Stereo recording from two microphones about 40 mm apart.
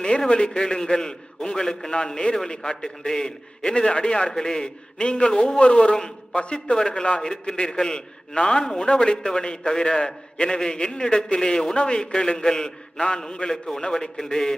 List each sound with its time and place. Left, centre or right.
0.3 s a man's voice: left